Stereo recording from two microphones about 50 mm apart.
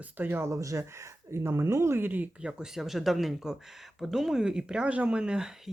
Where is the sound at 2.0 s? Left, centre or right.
Right.